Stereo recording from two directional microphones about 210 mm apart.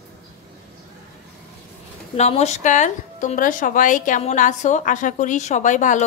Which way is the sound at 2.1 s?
30° left (ahead or behind).